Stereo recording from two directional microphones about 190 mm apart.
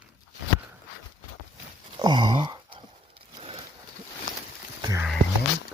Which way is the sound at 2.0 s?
25° right (ahead or behind).